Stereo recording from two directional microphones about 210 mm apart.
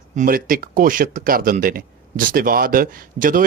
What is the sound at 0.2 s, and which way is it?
Speech, 40° right (ahead or behind).